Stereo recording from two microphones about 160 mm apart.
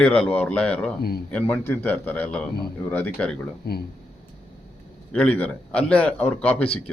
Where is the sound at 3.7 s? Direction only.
80° left.